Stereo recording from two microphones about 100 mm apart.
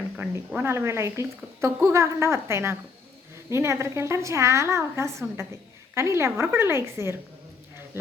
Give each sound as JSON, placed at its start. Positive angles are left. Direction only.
{"t": 0.2, "sound": "a woman's voice", "side_deg": -20}